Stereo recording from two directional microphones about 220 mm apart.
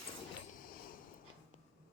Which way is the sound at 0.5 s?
40° left (ahead or behind).